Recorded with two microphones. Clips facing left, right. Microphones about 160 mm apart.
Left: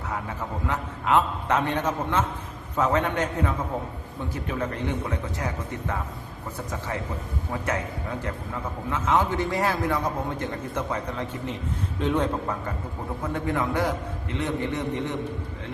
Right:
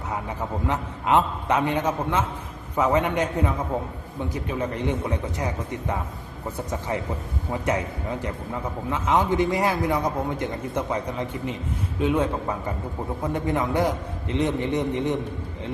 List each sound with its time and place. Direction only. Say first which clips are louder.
0.1 s a man's voice: right 3 dB; 20° right (ahead or behind)
6.7 s a man's voice: right 3 dB; 20° right (ahead or behind)